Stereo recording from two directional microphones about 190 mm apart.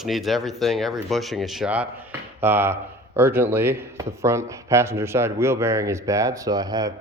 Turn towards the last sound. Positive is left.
turn(degrees=-20)  # may be behind; listen again after turning